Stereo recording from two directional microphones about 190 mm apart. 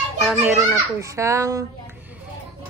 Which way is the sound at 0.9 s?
15° right (ahead or behind).